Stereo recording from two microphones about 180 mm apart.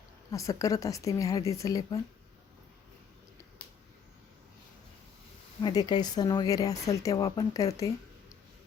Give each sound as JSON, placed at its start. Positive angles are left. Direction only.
{"t": 0.3, "sound": "a woman's voice", "side_deg": 20}
{"t": 5.6, "sound": "speech", "side_deg": 25}